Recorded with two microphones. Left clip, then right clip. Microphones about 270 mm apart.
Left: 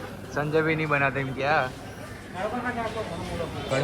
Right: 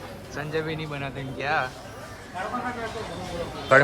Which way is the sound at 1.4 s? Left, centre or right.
Centre.